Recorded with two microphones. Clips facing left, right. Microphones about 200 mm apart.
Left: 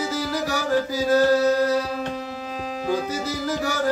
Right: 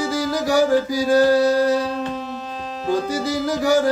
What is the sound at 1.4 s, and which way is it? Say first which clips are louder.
Music: right 3 dB; 35° right (ahead or behind).